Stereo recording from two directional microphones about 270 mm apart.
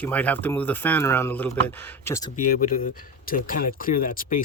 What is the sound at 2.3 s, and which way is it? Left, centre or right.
Speech, left.